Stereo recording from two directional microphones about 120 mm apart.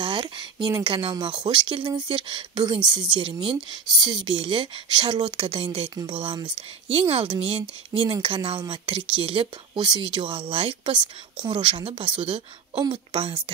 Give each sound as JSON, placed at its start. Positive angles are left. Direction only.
{"t": 0.0, "sound": "speech", "side_deg": -45}